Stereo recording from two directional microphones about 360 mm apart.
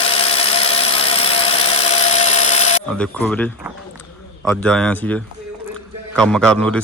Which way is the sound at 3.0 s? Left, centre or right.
Centre.